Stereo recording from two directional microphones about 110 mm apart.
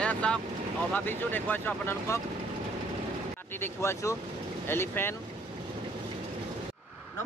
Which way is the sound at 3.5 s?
20° left (ahead or behind).